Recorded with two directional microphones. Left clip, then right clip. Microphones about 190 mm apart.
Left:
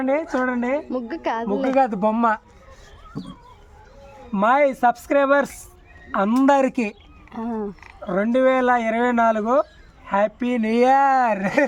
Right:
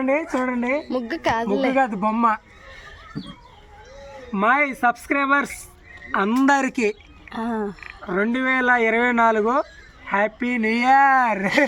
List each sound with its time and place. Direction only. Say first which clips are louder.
0.0 s a woman's voice: even; 10° left (ahead or behind)
1.7 s speech: left 2 dB; 25° left (ahead or behind)
4.4 s speech: left 2 dB; 45° left (ahead or behind)
6.1 s speech: left 1 dB; 60° left (ahead or behind)
7.3 s a woman's voice: right 2 dB; centre (ahead or behind)
8.0 s speech: left 4 dB; 50° left (ahead or behind)
11.2 s speech: even; 25° left (ahead or behind)